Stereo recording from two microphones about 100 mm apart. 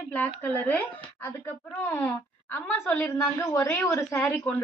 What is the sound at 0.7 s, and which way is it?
A woman's voice, 15° left (ahead or behind).